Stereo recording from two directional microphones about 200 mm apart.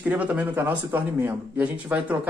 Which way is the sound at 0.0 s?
10° right (ahead or behind).